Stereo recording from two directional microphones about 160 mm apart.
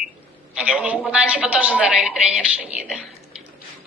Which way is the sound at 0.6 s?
10° right (ahead or behind).